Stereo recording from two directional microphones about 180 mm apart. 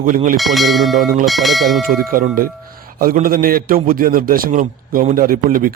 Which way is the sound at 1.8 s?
50° right (ahead or behind).